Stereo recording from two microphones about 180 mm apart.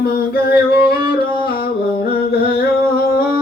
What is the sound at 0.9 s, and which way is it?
Music, 55° left (ahead or behind).